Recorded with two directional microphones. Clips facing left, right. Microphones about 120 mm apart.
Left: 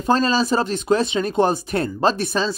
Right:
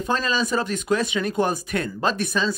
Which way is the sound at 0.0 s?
35° left (ahead or behind).